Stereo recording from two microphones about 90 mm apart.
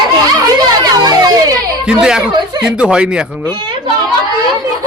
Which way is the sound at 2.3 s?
55° right (ahead or behind).